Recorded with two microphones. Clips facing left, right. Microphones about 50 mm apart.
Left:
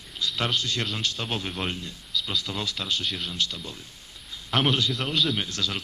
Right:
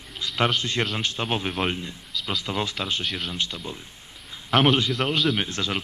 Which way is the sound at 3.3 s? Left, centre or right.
Right.